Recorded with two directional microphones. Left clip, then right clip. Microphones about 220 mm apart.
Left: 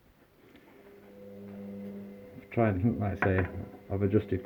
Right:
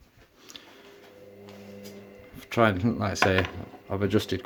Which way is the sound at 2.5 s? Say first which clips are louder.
Right 6 dB; 20° right (ahead or behind).